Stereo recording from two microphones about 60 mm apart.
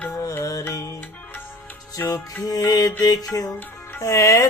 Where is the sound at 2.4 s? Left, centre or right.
Left.